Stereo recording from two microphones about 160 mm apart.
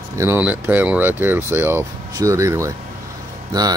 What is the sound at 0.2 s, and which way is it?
Speech, 10° right (ahead or behind).